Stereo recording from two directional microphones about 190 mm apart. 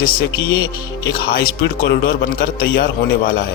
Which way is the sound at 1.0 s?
50° left (ahead or behind).